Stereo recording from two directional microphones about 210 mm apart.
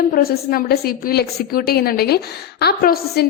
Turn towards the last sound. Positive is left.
turn(degrees=50)  # may be behind; listen again after turning